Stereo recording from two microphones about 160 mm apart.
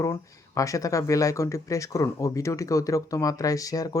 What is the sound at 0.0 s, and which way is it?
Speech, 20° left (ahead or behind).